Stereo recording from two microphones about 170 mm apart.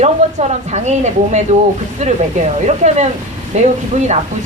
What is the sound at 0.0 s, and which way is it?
A woman's voice, 40° right (ahead or behind).